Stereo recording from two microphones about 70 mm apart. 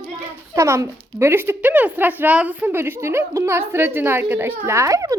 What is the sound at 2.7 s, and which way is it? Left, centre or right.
A woman's voice, right.